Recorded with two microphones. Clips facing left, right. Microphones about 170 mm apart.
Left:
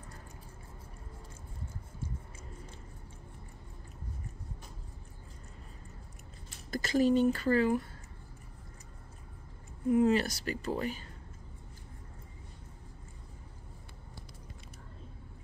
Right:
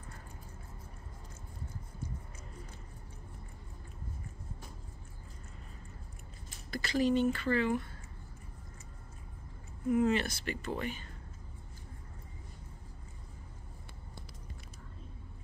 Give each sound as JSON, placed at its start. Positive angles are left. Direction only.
{"t": 6.7, "sound": "speech", "side_deg": 45}
{"t": 9.8, "sound": "speech", "side_deg": 35}